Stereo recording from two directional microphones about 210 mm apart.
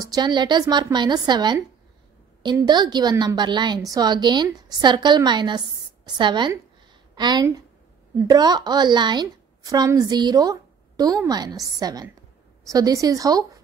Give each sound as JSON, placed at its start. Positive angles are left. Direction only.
{"t": 0.0, "sound": "a woman's voice", "side_deg": -20}